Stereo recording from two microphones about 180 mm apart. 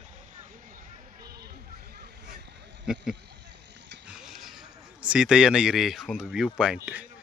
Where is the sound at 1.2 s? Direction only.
60° right (ahead or behind).